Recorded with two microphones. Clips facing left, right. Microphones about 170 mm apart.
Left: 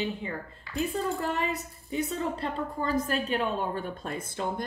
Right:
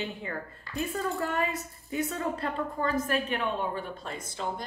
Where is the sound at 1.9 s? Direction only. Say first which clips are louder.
Left 1 dB; 30° left (ahead or behind).